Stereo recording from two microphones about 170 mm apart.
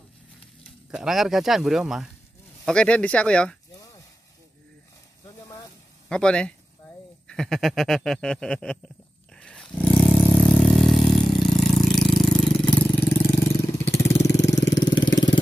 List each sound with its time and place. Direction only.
0.9 s speech: centre (ahead or behind)
3.7 s sizzle: 20° left (ahead or behind)
6.0 s speech: 5° left (ahead or behind)
7.2 s a sound: 5° left (ahead or behind)
10.1 s vehicle: 5° left (ahead or behind)
14.7 s engine: 25° left (ahead or behind)